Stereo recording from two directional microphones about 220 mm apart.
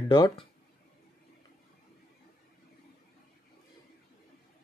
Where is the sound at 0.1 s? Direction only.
20° left (ahead or behind).